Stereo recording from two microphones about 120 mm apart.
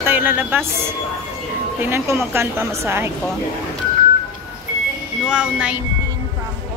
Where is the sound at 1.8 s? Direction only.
20° right (ahead or behind).